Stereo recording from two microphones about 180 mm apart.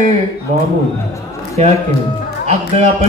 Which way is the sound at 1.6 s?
40° right (ahead or behind).